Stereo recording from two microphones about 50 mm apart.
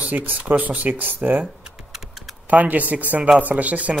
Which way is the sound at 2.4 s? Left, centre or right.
Right.